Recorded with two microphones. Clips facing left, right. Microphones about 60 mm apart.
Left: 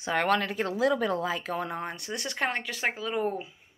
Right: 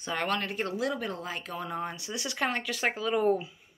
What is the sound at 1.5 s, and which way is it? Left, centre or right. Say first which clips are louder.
Speech: left 2 dB; left.